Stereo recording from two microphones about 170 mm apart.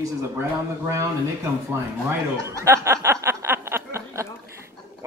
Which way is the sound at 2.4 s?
15° right (ahead or behind).